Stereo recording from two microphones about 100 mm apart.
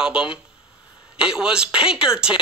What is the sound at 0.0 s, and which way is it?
Speech, 10° right (ahead or behind).